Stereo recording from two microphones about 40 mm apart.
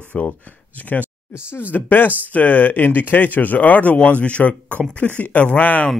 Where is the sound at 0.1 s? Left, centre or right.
Left.